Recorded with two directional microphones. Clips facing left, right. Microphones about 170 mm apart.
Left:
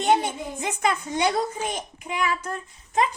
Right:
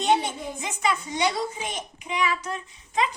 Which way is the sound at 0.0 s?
50° left (ahead or behind).